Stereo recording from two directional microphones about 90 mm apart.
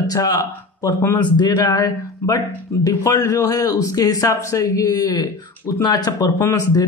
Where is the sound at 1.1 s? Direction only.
55° left (ahead or behind).